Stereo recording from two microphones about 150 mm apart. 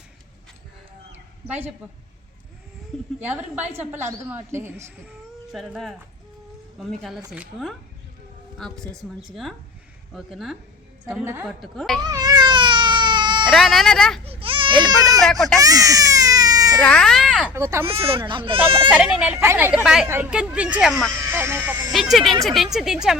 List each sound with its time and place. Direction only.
1.5 s speech: 15° right (ahead or behind)
3.2 s speech: 10° right (ahead or behind)
5.0 s a woman's voice: centre (ahead or behind)
12.0 s baby cry: 25° right (ahead or behind)
13.5 s speech: centre (ahead or behind)
14.3 s baby cry: 35° right (ahead or behind)
15.2 s a woman's voice: centre (ahead or behind)
15.5 s baby cry: 25° right (ahead or behind)
16.8 s speech: 5° left (ahead or behind)
17.5 s speech: 20° right (ahead or behind)
17.8 s speech: 40° right (ahead or behind)
18.9 s speech: 5° right (ahead or behind)
19.8 s a woman's voice: 5° right (ahead or behind)
21.9 s a woman's voice: centre (ahead or behind)